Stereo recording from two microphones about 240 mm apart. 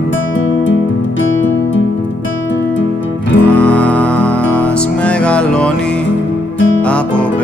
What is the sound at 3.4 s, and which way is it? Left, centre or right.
Music, centre.